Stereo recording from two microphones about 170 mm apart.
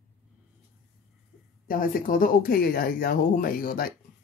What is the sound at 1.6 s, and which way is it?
Speech, 55° left (ahead or behind).